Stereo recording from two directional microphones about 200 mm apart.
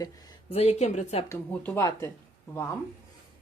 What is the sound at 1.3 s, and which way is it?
Speech, 10° left (ahead or behind).